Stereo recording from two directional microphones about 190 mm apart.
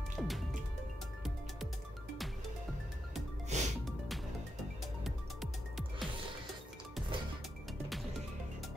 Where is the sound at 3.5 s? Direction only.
35° right (ahead or behind).